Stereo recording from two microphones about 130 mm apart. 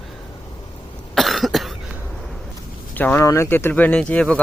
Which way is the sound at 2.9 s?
15° left (ahead or behind).